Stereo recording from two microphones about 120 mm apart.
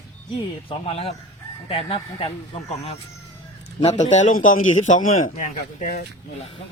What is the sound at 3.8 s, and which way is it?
A man's voice, 75° left (ahead or behind).